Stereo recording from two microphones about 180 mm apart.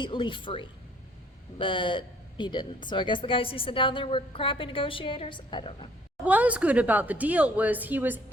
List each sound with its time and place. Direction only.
0.0 s speech: 25° left (ahead or behind)
6.2 s a woman's voice: 10° right (ahead or behind)